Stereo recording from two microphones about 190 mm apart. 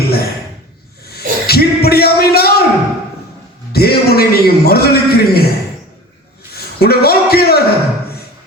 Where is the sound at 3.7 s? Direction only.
55° left (ahead or behind).